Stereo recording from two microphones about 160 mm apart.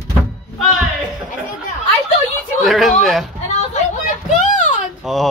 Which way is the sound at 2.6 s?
Centre (ahead or behind).